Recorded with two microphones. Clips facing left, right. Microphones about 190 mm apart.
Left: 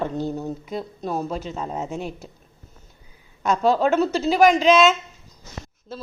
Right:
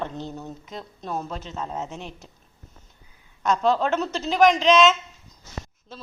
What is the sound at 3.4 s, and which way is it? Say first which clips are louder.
Speech: left 2 dB; 10° left (ahead or behind).